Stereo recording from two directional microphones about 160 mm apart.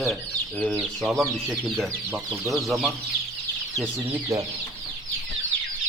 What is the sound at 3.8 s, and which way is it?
Speech, 15° right (ahead or behind).